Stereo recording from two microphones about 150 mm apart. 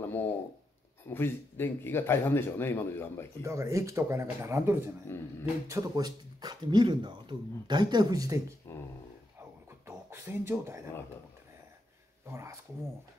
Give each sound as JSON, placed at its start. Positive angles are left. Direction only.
{"t": 0.0, "sound": "a sound", "side_deg": 15}
{"t": 1.0, "sound": "speech", "side_deg": 15}
{"t": 3.4, "sound": "speech", "side_deg": -20}
{"t": 5.1, "sound": "speech", "side_deg": 15}
{"t": 5.4, "sound": "speech", "side_deg": -20}
{"t": 9.8, "sound": "speech", "side_deg": -20}
{"t": 12.3, "sound": "speech", "side_deg": -20}